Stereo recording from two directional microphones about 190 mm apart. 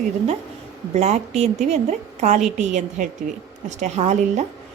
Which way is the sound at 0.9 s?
35° right (ahead or behind).